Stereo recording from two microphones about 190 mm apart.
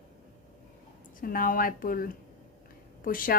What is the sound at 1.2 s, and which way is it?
Speech, 50° left (ahead or behind).